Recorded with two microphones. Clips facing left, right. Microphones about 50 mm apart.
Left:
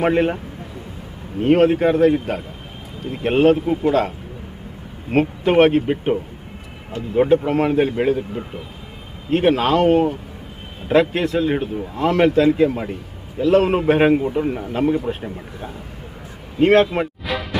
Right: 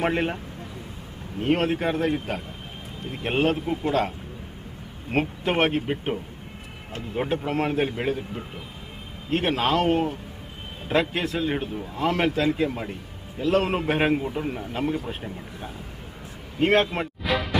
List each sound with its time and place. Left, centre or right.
0.0 s a man's voice: centre
1.4 s a man's voice: centre
5.1 s a man's voice: centre
16.5 s a sound: centre